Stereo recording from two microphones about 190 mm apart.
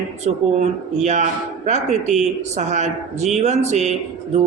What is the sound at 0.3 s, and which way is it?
Speech, 40° right (ahead or behind).